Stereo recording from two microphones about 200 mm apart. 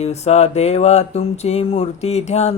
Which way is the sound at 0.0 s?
35° left (ahead or behind).